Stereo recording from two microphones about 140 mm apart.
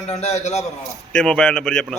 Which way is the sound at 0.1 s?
50° left (ahead or behind).